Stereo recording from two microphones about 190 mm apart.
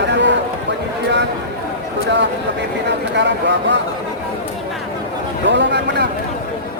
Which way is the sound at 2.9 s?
65° right (ahead or behind).